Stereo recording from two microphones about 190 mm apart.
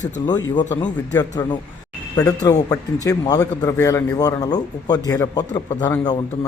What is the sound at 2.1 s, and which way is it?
A man's voice, 20° left (ahead or behind).